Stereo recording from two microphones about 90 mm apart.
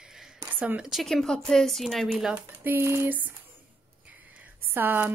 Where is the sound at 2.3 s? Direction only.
20° right (ahead or behind).